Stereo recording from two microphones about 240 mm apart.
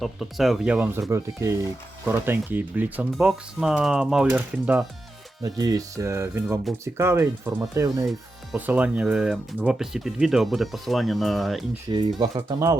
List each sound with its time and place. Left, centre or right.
0.0 s speech: centre
11.9 s speech: centre